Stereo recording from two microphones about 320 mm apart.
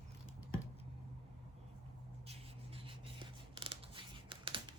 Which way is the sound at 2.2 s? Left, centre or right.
Centre.